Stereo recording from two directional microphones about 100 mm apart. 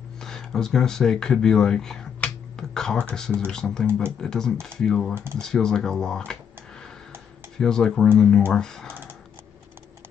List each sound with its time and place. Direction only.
0.2 s speech: 5° left (ahead or behind)
5.1 s speech: 25° right (ahead or behind)
5.4 s speech: 5° left (ahead or behind)
7.5 s speech: 5° left (ahead or behind)